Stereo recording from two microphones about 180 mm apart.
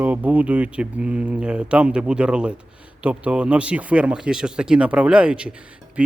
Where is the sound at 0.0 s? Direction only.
10° right (ahead or behind).